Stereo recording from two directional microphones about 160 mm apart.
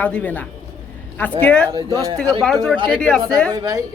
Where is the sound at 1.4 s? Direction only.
10° left (ahead or behind).